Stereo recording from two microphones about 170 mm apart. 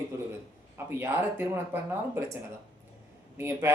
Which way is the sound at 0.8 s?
15° right (ahead or behind).